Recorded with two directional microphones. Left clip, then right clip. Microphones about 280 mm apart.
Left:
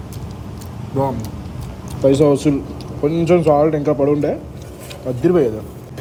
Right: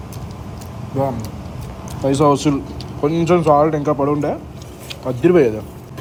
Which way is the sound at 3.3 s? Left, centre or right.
Right.